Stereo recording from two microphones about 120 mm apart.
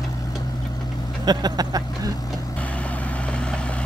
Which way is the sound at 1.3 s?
35° right (ahead or behind).